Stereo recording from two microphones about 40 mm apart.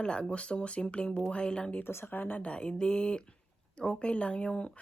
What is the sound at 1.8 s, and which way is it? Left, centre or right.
Speech, left.